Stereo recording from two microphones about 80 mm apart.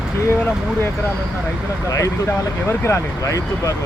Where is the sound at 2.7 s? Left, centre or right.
Left.